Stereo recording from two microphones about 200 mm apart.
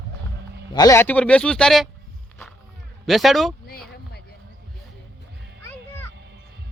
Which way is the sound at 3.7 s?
50° left (ahead or behind).